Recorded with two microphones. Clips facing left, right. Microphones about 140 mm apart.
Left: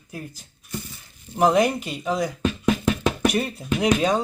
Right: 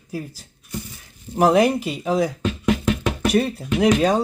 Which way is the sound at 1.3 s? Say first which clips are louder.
Right 3 dB; 5° right (ahead or behind).